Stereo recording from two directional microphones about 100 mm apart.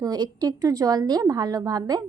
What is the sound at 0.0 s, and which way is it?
A woman's voice, 40° right (ahead or behind).